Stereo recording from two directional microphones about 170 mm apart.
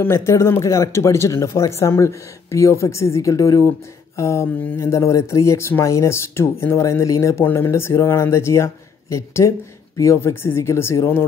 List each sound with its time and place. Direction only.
0.0 s speech: 15° left (ahead or behind)